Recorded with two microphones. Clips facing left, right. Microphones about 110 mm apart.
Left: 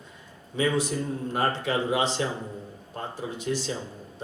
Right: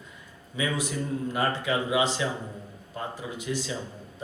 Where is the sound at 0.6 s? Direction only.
30° left (ahead or behind).